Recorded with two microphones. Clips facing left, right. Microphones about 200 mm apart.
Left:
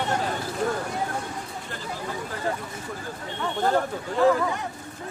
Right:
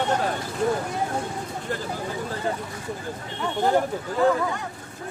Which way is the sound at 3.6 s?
10° right (ahead or behind).